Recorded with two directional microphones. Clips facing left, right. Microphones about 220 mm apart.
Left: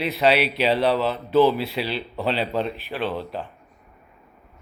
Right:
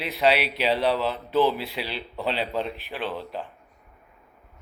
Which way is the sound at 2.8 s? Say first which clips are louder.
Left 4 dB; 15° right (ahead or behind).